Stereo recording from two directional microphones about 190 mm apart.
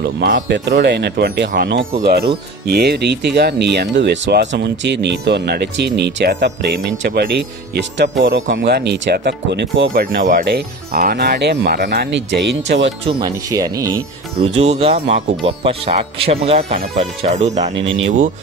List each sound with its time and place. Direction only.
0.0 s speech: 60° right (ahead or behind)
9.9 s speech: 50° right (ahead or behind)
13.2 s speech: 20° right (ahead or behind)
14.4 s speech: 35° right (ahead or behind)
17.7 s speech: 90° right